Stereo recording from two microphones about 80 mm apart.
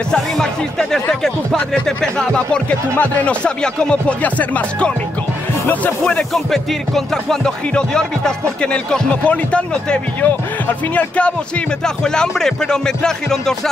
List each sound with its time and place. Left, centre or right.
0.1 s speech: centre
6.3 s speech: centre